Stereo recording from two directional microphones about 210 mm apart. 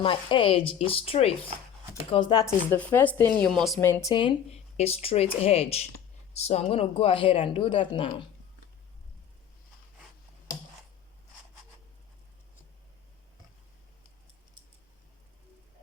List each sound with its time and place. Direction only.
0.0 s speech: 25° left (ahead or behind)
2.7 s speech: 5° left (ahead or behind)
3.8 s speech: 10° left (ahead or behind)
4.1 s speech: 25° left (ahead or behind)